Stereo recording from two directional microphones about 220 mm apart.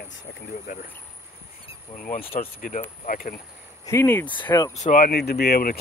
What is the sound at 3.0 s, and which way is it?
Speech, 40° left (ahead or behind).